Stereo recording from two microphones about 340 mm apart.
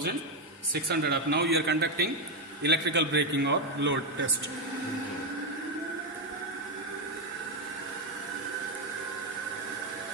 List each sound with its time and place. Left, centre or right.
0.9 s a man's voice: right